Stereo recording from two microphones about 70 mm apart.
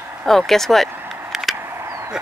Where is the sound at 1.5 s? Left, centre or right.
Right.